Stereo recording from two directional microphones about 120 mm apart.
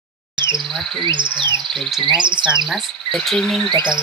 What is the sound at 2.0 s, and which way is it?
Speech, 40° right (ahead or behind).